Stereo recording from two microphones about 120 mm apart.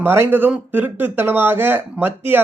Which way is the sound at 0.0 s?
20° right (ahead or behind).